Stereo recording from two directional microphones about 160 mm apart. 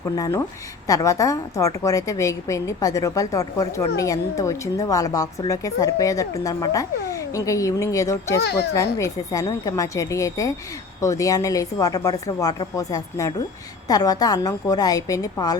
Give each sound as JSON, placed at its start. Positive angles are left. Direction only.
{"t": 0.0, "sound": "speech", "side_deg": 20}